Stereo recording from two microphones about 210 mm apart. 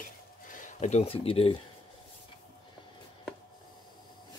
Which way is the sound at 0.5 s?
35° left (ahead or behind).